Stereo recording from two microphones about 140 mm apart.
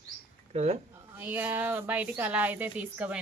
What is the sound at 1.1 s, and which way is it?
A woman's voice, 15° right (ahead or behind).